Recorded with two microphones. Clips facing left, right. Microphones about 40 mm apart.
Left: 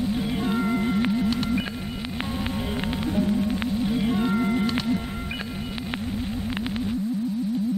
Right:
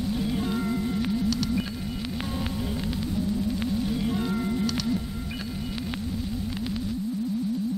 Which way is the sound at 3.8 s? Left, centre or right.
Left.